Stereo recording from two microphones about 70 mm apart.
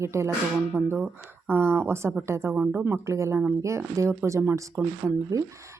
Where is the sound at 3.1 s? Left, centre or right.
Right.